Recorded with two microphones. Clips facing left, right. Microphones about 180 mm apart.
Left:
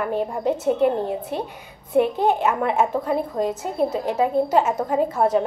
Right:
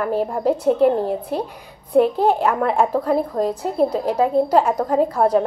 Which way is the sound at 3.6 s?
Centre (ahead or behind).